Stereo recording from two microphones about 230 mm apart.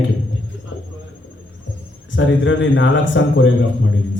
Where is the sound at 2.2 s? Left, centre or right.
Left.